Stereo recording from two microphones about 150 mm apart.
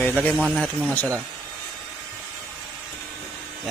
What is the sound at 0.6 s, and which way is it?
Speech, 10° left (ahead or behind).